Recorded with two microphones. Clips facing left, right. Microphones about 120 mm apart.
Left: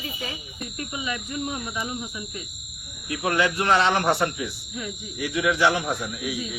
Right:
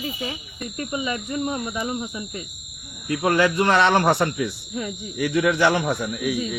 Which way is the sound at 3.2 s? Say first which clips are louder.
Right 3 dB; 60° right (ahead or behind).